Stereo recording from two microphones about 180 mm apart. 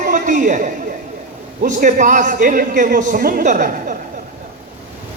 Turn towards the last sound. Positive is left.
turn(degrees=-45)  # may be behind; listen again after turning